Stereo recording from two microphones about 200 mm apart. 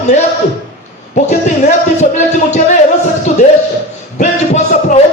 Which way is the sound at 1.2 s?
35° left (ahead or behind).